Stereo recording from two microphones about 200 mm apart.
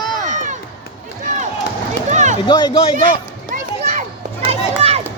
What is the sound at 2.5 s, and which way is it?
Speech, 20° left (ahead or behind).